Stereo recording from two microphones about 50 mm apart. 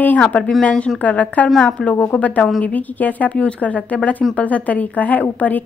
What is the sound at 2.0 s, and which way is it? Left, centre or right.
A woman's voice, left.